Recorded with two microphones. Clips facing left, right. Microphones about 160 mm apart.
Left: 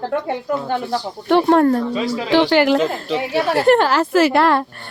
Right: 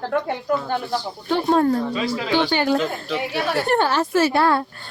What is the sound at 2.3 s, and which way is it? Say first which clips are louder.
Speech: left 6 dB; 90° left.